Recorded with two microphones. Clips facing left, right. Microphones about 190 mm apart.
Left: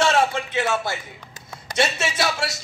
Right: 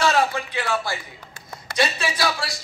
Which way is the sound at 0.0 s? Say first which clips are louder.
Left 1 dB; 25° left (ahead or behind).